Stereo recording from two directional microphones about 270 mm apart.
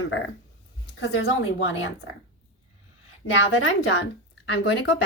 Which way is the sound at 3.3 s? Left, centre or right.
Left.